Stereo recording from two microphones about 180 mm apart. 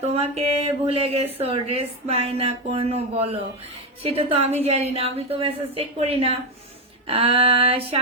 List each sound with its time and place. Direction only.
0.0 s speech: 35° right (ahead or behind)